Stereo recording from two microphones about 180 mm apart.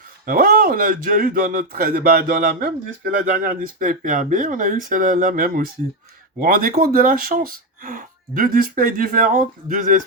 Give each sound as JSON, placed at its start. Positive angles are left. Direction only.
{"t": 0.3, "sound": "speech", "side_deg": -55}